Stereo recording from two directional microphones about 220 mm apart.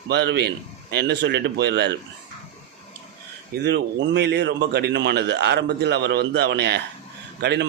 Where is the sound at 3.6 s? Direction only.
50° right (ahead or behind).